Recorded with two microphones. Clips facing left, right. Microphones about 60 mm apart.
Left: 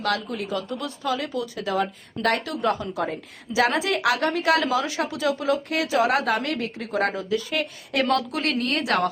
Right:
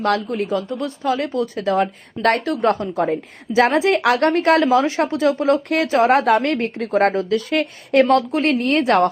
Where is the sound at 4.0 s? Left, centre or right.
Right.